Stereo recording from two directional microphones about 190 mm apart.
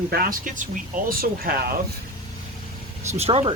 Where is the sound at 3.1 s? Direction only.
35° right (ahead or behind).